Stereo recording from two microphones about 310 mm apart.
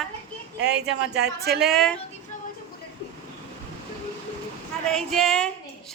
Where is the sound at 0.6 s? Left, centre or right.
Right.